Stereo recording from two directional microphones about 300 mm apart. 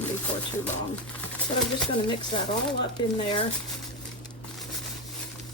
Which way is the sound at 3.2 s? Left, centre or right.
Centre.